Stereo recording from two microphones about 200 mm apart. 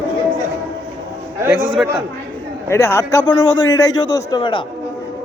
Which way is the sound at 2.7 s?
15° left (ahead or behind).